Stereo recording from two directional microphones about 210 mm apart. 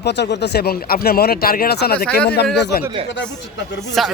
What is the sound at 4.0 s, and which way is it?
Speech, centre (ahead or behind).